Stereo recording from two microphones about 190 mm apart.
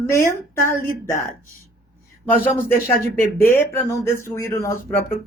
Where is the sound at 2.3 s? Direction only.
10° left (ahead or behind).